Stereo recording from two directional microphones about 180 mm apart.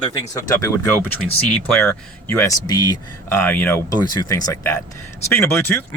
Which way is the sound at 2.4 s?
20° left (ahead or behind).